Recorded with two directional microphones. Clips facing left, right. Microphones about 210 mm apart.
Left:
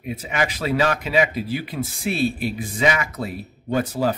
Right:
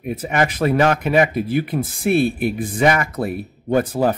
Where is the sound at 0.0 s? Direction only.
50° right (ahead or behind).